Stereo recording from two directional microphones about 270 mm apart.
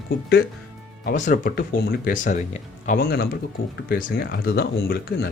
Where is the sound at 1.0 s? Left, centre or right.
Left.